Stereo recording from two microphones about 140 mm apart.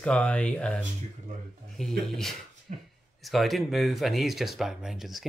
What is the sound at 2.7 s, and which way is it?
Speech, 65° right (ahead or behind).